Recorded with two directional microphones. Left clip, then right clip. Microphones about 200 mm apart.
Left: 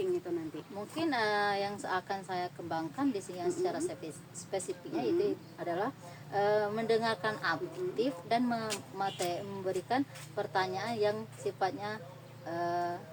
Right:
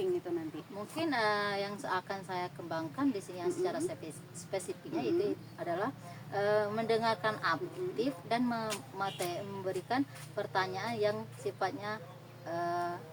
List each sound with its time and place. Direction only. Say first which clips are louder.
0.9 s a woman's voice: left 1 dB; 10° left (ahead or behind)